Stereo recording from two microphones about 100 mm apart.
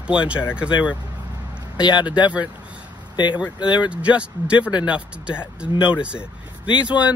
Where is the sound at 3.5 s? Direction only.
50° left (ahead or behind).